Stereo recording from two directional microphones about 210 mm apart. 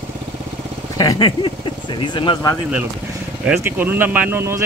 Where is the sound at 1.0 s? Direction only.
20° left (ahead or behind).